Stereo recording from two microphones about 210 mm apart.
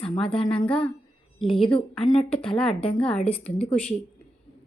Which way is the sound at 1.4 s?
25° left (ahead or behind).